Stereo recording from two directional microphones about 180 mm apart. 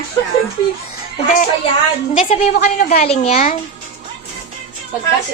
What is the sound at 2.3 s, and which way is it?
Speech, 35° left (ahead or behind).